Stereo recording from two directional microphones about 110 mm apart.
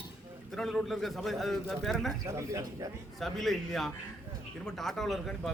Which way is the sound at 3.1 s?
Centre (ahead or behind).